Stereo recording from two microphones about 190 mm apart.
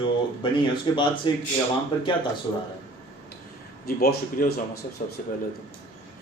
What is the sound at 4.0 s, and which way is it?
Speech, 55° left (ahead or behind).